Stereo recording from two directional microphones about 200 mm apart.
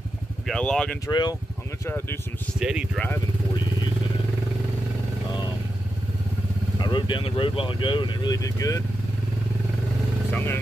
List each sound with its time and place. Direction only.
0.5 s speech: 5° left (ahead or behind)
1.0 s speech: 20° left (ahead or behind)
2.6 s speech: 5° right (ahead or behind)
6.8 s speech: 25° left (ahead or behind)
10.3 s speech: 10° left (ahead or behind)